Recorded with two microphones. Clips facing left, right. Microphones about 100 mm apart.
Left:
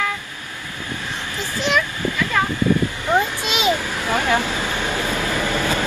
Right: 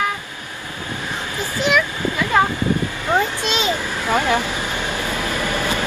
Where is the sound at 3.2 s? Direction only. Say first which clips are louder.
Right 1 dB; 15° left (ahead or behind).